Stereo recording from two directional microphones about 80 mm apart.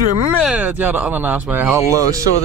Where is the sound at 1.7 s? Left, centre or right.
Right.